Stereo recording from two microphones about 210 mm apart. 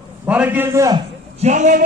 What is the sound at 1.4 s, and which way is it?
Speech, 35° right (ahead or behind).